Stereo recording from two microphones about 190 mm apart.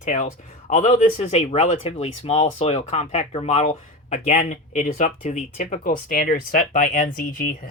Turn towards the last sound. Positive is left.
turn(degrees=45)  # may be behind; listen again after turning